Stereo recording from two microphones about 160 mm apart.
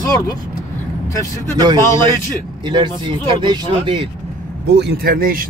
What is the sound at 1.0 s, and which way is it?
Speech, 20° left (ahead or behind).